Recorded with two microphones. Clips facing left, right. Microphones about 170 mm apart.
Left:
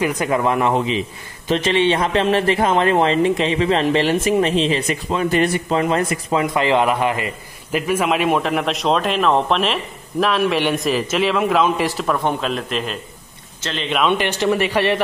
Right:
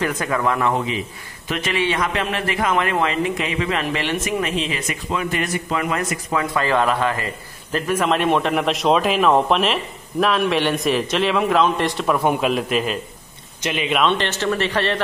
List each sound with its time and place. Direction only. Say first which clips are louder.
0.2 s a man's voice: left 3 dB; 20° left (ahead or behind); by 13.8 s 15° right (ahead or behind)
14.0 s a man's voice: left 6 dB; 10° left (ahead or behind)